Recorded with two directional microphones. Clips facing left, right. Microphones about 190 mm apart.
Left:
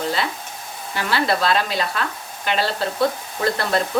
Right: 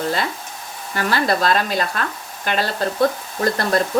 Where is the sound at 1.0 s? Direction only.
45° right (ahead or behind).